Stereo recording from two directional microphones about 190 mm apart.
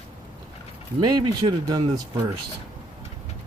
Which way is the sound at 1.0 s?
20° right (ahead or behind).